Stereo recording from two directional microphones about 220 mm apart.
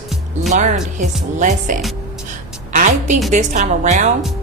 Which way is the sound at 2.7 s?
35° right (ahead or behind).